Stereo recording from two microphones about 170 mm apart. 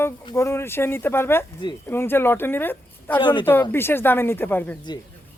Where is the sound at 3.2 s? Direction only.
25° left (ahead or behind).